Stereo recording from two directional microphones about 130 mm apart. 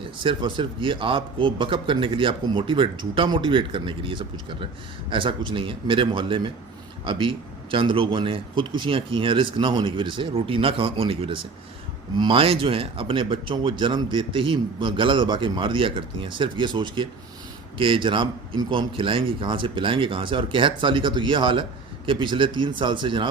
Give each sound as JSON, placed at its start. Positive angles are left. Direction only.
{"t": 0.0, "sound": "speech", "side_deg": -40}